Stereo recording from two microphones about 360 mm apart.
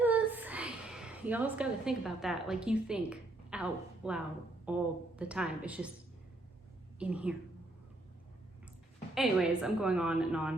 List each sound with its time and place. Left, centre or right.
0.0 s a sound: centre
4.6 s a woman's voice: centre
7.0 s a woman's voice: centre
9.1 s a woman's voice: centre